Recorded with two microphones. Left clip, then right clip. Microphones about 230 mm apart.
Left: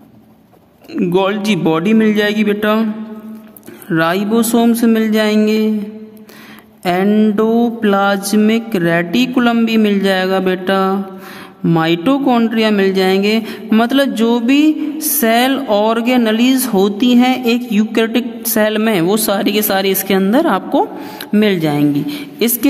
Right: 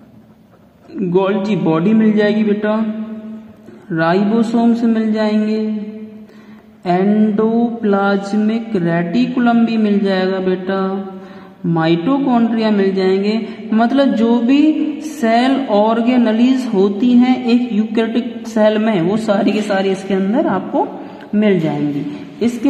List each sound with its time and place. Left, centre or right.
0.9 s speech: left
3.9 s speech: left
6.8 s speech: left